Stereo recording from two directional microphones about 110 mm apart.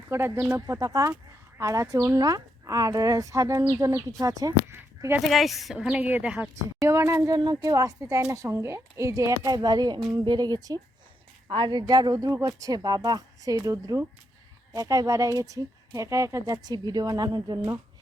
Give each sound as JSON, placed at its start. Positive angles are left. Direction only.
{"t": 0.1, "sound": "speech", "side_deg": -25}
{"t": 5.2, "sound": "a woman's voice", "side_deg": 0}
{"t": 5.7, "sound": "a woman's voice", "side_deg": -10}
{"t": 6.8, "sound": "speech", "side_deg": -25}
{"t": 7.3, "sound": "speech", "side_deg": -40}
{"t": 11.4, "sound": "speech", "side_deg": -50}